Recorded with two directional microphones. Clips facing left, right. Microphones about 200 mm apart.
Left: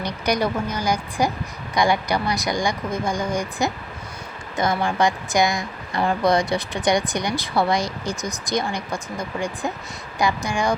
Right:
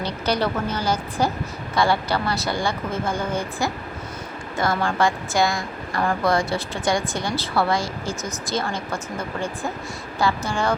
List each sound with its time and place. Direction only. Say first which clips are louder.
0.0 s a woman's voice: left 1 dB; 15° left (ahead or behind)